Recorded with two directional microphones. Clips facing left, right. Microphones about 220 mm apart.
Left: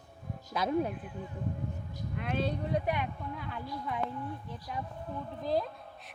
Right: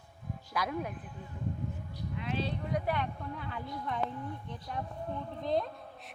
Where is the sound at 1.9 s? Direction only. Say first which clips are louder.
Left 2 dB; 50° left (ahead or behind).